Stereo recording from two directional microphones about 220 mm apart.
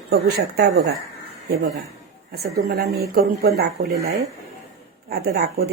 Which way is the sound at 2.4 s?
45° right (ahead or behind).